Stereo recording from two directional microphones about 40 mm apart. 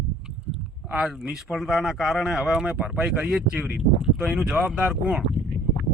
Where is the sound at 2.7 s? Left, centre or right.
Right.